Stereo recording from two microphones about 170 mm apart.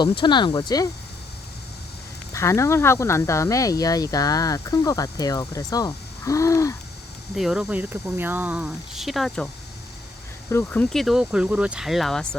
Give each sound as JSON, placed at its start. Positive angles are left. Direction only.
{"t": 0.0, "sound": "speech", "side_deg": 25}
{"t": 2.3, "sound": "speech", "side_deg": 15}
{"t": 7.3, "sound": "speech", "side_deg": 0}
{"t": 10.5, "sound": "speech", "side_deg": 10}